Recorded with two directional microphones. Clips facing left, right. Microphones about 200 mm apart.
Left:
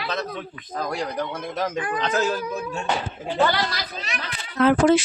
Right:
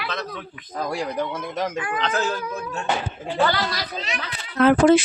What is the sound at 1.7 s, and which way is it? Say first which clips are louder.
Speech: left 1 dB; 35° left (ahead or behind).